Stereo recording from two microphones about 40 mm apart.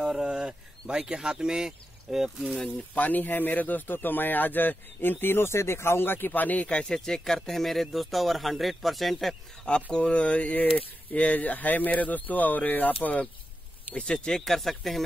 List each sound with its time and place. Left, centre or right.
0.0 s a sound: centre
0.3 s speech: right
2.9 s speech: left
5.2 s speech: left
6.8 s speech: centre
9.7 s speech: left
13.8 s speech: left; by 15.0 s centre